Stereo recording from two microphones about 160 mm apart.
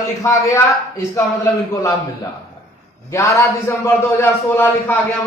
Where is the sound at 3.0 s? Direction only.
20° left (ahead or behind).